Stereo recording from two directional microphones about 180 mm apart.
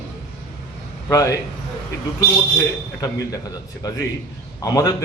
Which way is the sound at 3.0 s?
20° left (ahead or behind).